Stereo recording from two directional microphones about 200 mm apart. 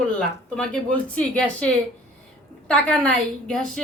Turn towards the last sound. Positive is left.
turn(degrees=5)  # may be behind; listen again after turning